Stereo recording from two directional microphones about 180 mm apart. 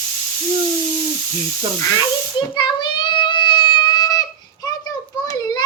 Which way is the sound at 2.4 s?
25° left (ahead or behind).